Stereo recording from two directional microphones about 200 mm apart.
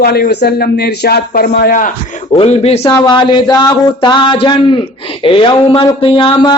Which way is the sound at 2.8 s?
20° left (ahead or behind).